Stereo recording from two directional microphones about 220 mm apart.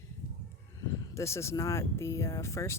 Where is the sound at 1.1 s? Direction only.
10° left (ahead or behind).